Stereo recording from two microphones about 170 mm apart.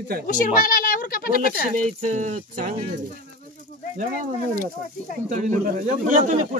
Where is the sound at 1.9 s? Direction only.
45° right (ahead or behind).